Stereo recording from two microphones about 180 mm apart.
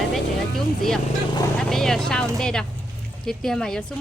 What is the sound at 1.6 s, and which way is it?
Speech, centre (ahead or behind).